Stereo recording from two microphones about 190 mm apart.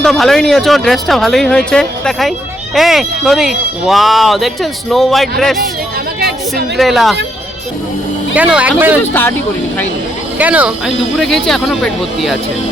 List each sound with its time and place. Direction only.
0.0 s speech: centre (ahead or behind)
6.1 s chatter: 60° right (ahead or behind)
6.7 s speech: centre (ahead or behind)
8.4 s speech: 5° right (ahead or behind)
9.0 s speech: 10° left (ahead or behind)
10.3 s speech: 5° right (ahead or behind)